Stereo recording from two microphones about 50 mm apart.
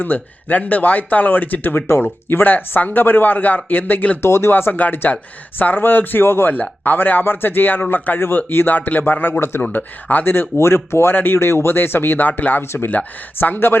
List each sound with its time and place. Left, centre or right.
0.0 s speech: left
4.2 s speech: left
4.5 s speech: left
6.5 s speech: left
10.6 s speech: left
11.1 s speech: left
13.4 s speech: left